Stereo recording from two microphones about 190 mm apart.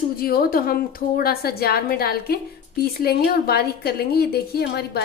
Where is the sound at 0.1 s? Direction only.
50° left (ahead or behind).